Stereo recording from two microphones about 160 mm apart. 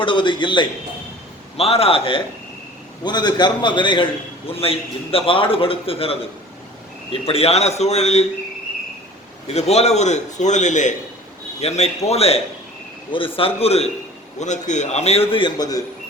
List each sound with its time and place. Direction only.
0.0 s a man's voice: 30° left (ahead or behind)
9.5 s a man's voice: 40° left (ahead or behind); by 15.8 s 25° left (ahead or behind)